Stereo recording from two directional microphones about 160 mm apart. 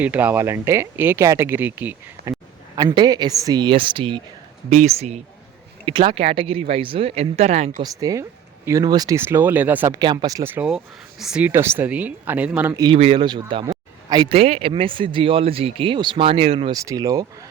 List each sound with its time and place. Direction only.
0.0 s speech: 10° right (ahead or behind)
2.7 s speech: 25° right (ahead or behind)
4.7 s a man's voice: 45° right (ahead or behind)
7.8 s speech: 20° right (ahead or behind)
10.0 s speech: 25° right (ahead or behind); by 12.7 s 10° right (ahead or behind)
12.7 s a man's voice: 25° right (ahead or behind)
16.7 s speech: 20° right (ahead or behind)